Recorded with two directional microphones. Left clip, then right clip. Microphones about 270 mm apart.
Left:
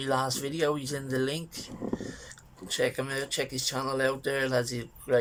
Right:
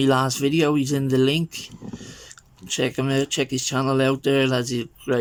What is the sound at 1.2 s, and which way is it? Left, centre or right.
Speech, right.